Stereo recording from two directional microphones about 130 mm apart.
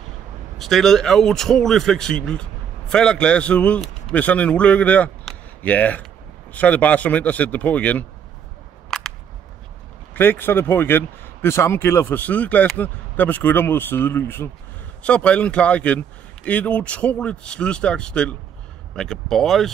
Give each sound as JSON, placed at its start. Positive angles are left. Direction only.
{"t": 0.6, "sound": "a man's voice", "side_deg": 0}
{"t": 8.9, "sound": "a sound", "side_deg": 5}
{"t": 10.1, "sound": "a man's voice", "side_deg": 15}